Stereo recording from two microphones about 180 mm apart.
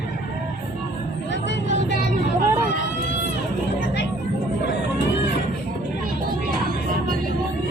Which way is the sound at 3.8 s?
75° left (ahead or behind).